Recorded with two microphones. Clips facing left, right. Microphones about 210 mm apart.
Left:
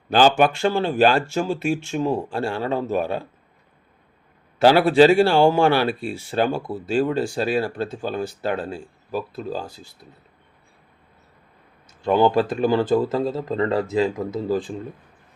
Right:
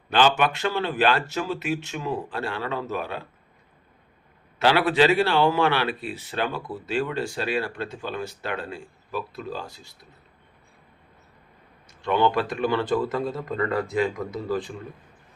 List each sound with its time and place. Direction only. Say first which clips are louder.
0.1 s speech: left 5 dB; 40° left (ahead or behind)
0.9 s speech: left 5 dB; 45° left (ahead or behind)
1.5 s speech: left 5 dB; 30° left (ahead or behind)
3.0 s speech: left 7 dB; 45° left (ahead or behind)
4.8 s speech: left 7 dB; 30° left (ahead or behind)
5.0 s speech: left 5 dB; 45° left (ahead or behind)
5.4 s speech: left 5 dB; 30° left (ahead or behind)
12.0 s speech: left 5 dB; 30° left (ahead or behind)